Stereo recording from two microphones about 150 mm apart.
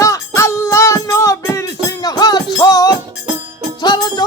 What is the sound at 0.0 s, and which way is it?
Music, 20° left (ahead or behind).